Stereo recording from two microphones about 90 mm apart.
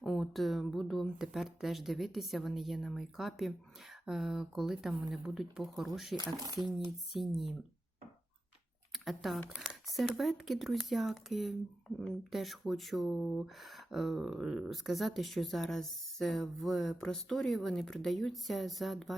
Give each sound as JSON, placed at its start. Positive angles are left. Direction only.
{"t": 0.0, "sound": "speech", "side_deg": 0}
{"t": 6.1, "sound": "speech", "side_deg": -45}
{"t": 7.1, "sound": "speech", "side_deg": 0}
{"t": 8.9, "sound": "speech", "side_deg": 0}